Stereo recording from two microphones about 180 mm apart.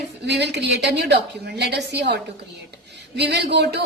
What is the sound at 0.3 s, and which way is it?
A woman's voice, 70° right (ahead or behind).